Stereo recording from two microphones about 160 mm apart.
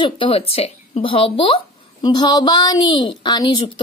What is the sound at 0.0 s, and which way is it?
A woman's voice, 35° left (ahead or behind).